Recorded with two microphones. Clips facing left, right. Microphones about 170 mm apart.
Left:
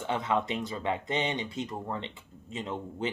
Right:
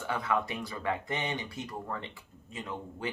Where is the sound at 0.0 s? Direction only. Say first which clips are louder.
Left 2 dB; 20° left (ahead or behind).